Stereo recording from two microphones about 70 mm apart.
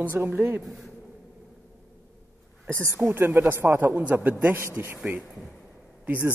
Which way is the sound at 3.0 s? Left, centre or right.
Right.